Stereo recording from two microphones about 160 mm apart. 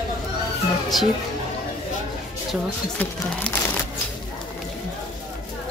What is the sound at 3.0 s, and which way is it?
Speech, 10° left (ahead or behind).